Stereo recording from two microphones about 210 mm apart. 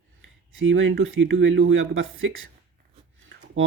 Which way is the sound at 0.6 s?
70° right (ahead or behind).